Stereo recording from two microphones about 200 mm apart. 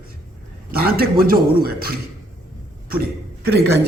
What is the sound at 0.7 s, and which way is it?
A man's voice, 50° right (ahead or behind).